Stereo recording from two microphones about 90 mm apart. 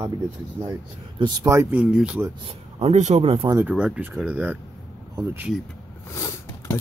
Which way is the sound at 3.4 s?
45° right (ahead or behind).